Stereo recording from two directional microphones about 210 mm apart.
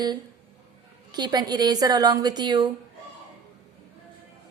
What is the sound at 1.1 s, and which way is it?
A woman's voice, 20° right (ahead or behind).